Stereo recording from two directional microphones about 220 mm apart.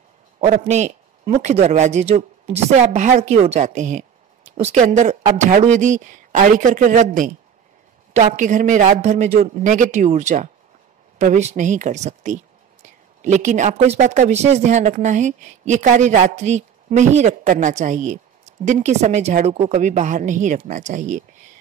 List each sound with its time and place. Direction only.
0.4 s a man's voice: 30° right (ahead or behind)